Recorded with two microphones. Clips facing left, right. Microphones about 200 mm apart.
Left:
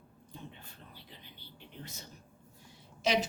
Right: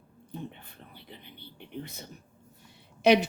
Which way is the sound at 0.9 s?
60° right (ahead or behind).